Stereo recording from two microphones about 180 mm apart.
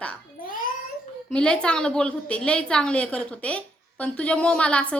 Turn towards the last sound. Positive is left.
turn(degrees=5)  # may be behind; listen again after turning